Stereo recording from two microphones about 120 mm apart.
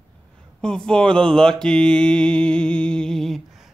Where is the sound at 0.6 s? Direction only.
5° left (ahead or behind).